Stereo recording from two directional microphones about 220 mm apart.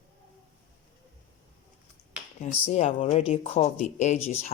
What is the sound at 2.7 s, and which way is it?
Speech, 30° left (ahead or behind).